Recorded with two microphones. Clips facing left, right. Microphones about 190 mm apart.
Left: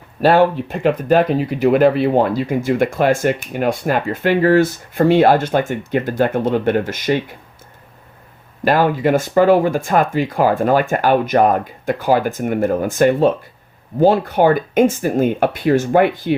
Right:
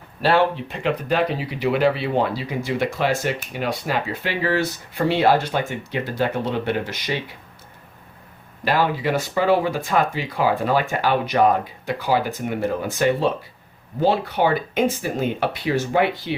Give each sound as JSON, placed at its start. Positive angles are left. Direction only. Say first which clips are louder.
{"t": 0.2, "sound": "speech", "louder": "left 6 dB", "side_deg": 45}
{"t": 8.6, "sound": "speech", "louder": "left 6 dB", "side_deg": 50}